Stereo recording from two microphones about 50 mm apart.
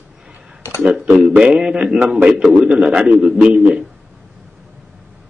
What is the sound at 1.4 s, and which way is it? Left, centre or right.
A man's voice, centre.